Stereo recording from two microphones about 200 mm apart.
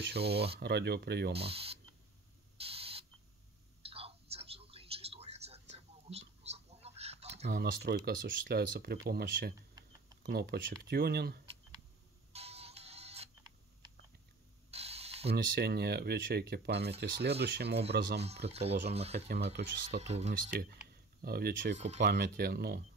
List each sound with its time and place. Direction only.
0.1 s speech: 55° right (ahead or behind)
1.3 s speech: 30° right (ahead or behind)
2.5 s a sound: 30° right (ahead or behind)
3.8 s whispering: 30° right (ahead or behind)
7.4 s speech: 50° right (ahead or behind)
12.3 s music: 30° right (ahead or behind)
14.7 s mechanisms: 30° right (ahead or behind)
15.3 s speech: 50° right (ahead or behind)
18.5 s speech: 30° right (ahead or behind)
19.2 s speech: 55° right (ahead or behind)
20.1 s speech: 35° right (ahead or behind)
21.2 s speech: 50° right (ahead or behind)
21.7 s speech: 35° right (ahead or behind)
22.0 s speech: 55° right (ahead or behind)